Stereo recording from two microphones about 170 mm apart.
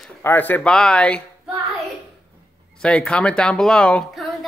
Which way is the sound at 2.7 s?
5° left (ahead or behind).